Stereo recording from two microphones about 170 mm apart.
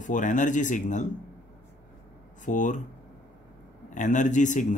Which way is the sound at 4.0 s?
45° left (ahead or behind).